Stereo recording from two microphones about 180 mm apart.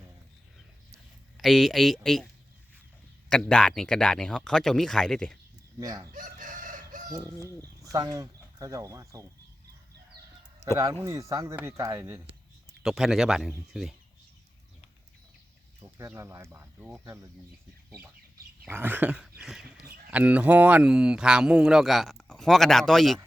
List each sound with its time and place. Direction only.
1.4 s speech: centre (ahead or behind)
3.2 s speech: 5° left (ahead or behind)
5.8 s speech: 20° right (ahead or behind)
6.1 s chicken: 45° right (ahead or behind)
7.2 s chicken: 15° left (ahead or behind)
7.9 s speech: 20° right (ahead or behind)
10.6 s speech: 15° left (ahead or behind)
11.0 s speech: 15° right (ahead or behind)
12.8 s speech: centre (ahead or behind)
15.8 s speech: 15° right (ahead or behind)
18.6 s speech: 10° right (ahead or behind)